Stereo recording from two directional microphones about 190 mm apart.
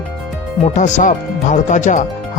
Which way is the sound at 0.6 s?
40° left (ahead or behind).